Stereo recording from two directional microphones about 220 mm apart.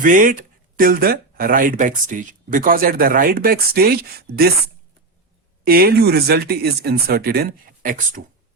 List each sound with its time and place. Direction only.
0.0 s speech: 35° right (ahead or behind)
5.6 s speech: 45° right (ahead or behind)